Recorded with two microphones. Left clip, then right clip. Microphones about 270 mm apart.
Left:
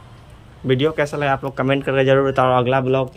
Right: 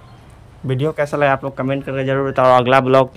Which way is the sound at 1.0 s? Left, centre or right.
Centre.